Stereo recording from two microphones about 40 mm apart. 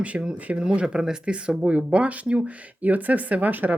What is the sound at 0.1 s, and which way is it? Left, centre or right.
Speech, right.